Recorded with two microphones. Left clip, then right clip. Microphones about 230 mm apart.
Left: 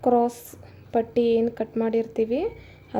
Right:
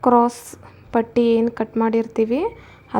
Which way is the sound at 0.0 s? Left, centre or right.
Centre.